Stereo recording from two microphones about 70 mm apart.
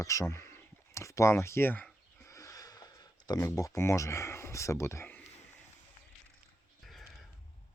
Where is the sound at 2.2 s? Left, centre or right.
Left.